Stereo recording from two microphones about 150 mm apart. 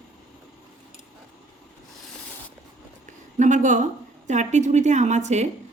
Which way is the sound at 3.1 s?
55° right (ahead or behind).